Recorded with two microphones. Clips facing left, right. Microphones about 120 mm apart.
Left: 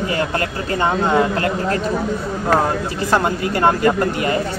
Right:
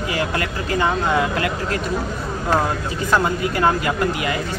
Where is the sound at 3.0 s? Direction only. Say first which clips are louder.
Left 1 dB; 35° left (ahead or behind).